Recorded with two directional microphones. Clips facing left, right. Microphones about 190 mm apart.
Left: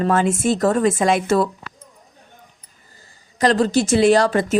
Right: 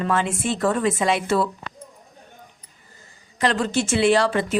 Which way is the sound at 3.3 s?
40° left (ahead or behind).